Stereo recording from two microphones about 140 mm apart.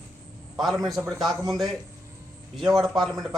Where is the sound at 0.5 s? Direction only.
Centre (ahead or behind).